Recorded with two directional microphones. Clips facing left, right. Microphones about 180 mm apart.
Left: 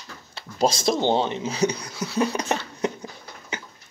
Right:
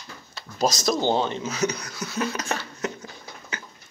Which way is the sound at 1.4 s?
30° left (ahead or behind).